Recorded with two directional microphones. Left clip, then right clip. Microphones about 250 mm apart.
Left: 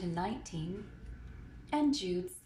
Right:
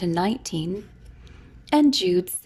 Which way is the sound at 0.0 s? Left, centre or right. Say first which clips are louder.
Right 13 dB; right.